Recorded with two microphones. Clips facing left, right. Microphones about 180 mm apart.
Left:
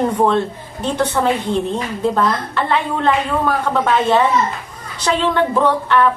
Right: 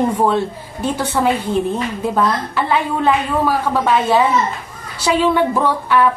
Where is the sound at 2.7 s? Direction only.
5° right (ahead or behind).